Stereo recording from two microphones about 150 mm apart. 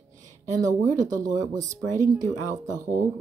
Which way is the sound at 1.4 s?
55° right (ahead or behind).